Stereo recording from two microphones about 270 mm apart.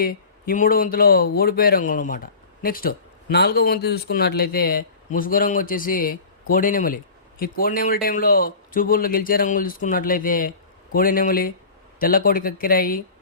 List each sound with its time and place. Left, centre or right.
0.0 s speech: left